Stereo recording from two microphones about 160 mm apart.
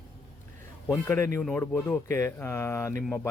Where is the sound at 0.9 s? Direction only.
15° left (ahead or behind).